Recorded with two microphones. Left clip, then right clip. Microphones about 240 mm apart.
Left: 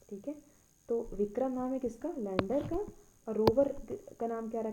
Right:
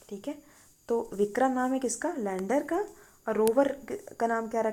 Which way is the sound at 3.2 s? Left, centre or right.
Right.